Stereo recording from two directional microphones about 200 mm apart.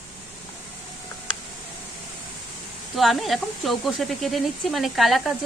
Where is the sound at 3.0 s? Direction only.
Centre (ahead or behind).